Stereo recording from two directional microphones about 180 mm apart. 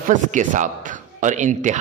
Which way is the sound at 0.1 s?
45° right (ahead or behind).